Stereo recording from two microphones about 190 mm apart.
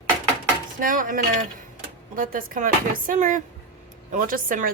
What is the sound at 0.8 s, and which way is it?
A woman's voice, 45° right (ahead or behind).